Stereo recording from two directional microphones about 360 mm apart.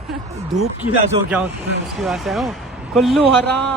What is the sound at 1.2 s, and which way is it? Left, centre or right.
A man's voice, centre.